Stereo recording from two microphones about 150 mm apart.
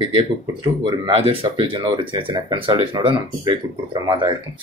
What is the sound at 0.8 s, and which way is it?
Speech, 35° right (ahead or behind).